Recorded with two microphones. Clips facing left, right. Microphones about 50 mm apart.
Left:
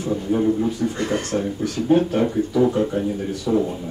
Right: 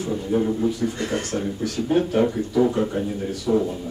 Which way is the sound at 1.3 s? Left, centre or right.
Centre.